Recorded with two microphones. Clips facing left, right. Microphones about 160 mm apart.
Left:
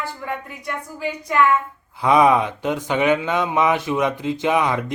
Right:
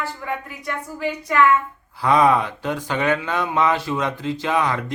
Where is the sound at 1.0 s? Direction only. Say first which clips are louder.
Right 1 dB; 10° left (ahead or behind).